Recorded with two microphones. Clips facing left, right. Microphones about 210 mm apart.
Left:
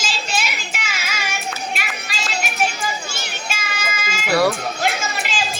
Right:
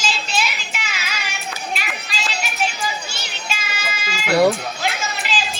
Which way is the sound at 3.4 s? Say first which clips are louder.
Right 1 dB; 50° left (ahead or behind).